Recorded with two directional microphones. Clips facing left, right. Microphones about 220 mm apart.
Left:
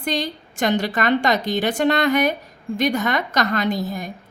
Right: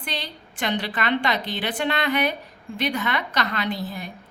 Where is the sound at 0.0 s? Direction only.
45° left (ahead or behind).